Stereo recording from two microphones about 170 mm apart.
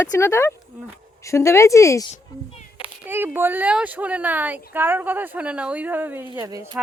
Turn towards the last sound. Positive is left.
turn(degrees=-15)  # may be behind; listen again after turning